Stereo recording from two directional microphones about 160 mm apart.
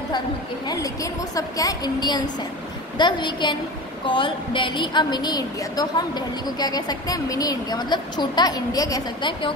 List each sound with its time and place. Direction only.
0.7 s a woman's voice: 20° left (ahead or behind)